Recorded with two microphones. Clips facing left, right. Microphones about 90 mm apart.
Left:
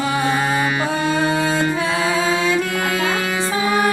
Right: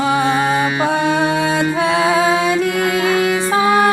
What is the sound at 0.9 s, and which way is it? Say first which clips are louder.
Music: right 3 dB; 70° right (ahead or behind).